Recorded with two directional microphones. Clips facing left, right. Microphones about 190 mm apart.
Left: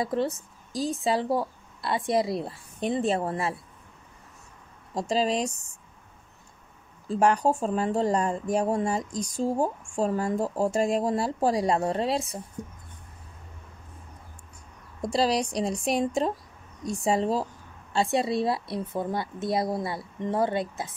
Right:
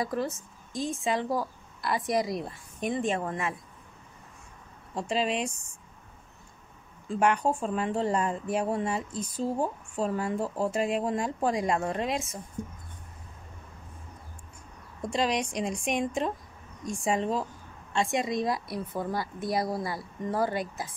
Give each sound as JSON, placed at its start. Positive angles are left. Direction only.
{"t": 0.0, "sound": "speech", "side_deg": 30}
{"t": 4.9, "sound": "speech", "side_deg": 35}
{"t": 7.1, "sound": "speech", "side_deg": 35}
{"t": 15.0, "sound": "speech", "side_deg": 35}